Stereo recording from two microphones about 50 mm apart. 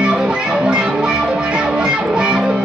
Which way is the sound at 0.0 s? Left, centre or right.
Right.